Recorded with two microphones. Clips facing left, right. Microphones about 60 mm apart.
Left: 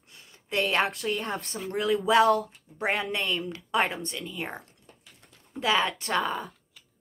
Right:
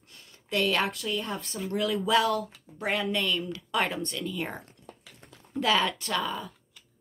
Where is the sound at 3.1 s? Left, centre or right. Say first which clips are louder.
Right 1 dB; left.